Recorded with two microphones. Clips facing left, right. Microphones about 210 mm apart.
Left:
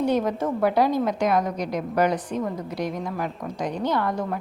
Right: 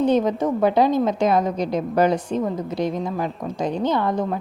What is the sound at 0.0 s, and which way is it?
A woman's voice, 20° right (ahead or behind).